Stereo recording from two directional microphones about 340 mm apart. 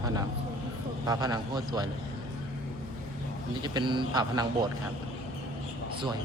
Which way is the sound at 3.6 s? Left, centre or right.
Centre.